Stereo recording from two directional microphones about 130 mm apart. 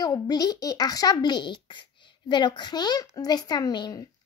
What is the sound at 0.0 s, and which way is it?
Speech, 30° left (ahead or behind).